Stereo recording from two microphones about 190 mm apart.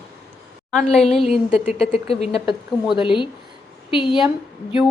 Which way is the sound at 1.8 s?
30° left (ahead or behind).